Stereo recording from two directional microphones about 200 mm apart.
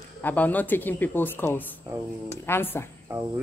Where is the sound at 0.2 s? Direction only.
10° left (ahead or behind).